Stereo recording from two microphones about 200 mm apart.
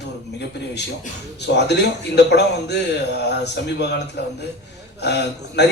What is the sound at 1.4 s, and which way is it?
A man's voice, 60° left (ahead or behind).